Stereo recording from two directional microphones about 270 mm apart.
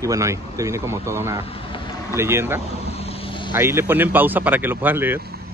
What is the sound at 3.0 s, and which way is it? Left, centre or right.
Vehicle, left.